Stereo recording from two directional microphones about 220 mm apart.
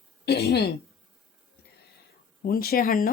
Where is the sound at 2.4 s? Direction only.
40° left (ahead or behind).